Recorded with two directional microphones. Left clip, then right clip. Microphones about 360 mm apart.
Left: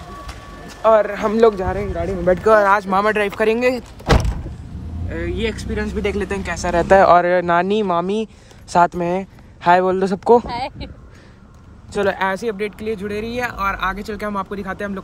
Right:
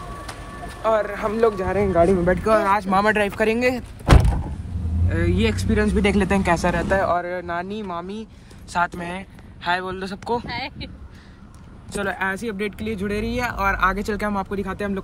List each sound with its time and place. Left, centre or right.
0.8 s speech: left
1.6 s speech: centre
5.8 s speech: right
6.8 s speech: left
10.5 s speech: centre
11.9 s speech: left
12.4 s speech: centre